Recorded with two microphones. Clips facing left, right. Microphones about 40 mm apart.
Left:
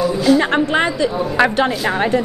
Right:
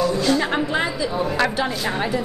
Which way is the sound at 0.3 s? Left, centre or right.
Centre.